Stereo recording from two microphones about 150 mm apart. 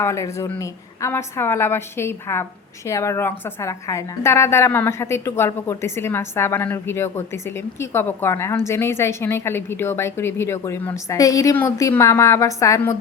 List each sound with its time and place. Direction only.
0.0 s a woman's voice: 20° left (ahead or behind)